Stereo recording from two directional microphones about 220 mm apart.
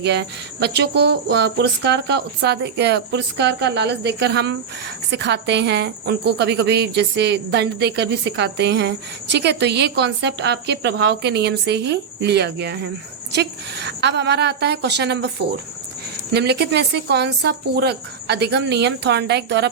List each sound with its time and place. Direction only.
0.0 s speech: 50° right (ahead or behind)